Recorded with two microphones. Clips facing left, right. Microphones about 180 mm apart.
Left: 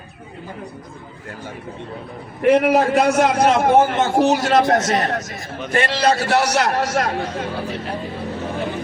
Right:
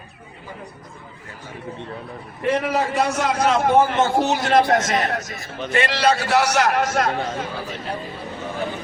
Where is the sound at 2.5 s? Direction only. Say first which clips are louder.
Left 7 dB; 60° left (ahead or behind).